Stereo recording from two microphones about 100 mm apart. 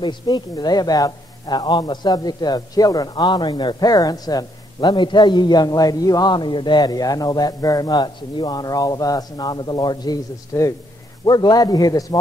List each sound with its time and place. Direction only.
0.0 s a man's voice: 45° left (ahead or behind)
4.7 s a man's voice: 50° left (ahead or behind)